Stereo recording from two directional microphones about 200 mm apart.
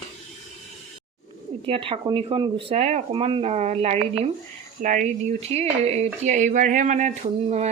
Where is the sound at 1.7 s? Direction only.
25° right (ahead or behind).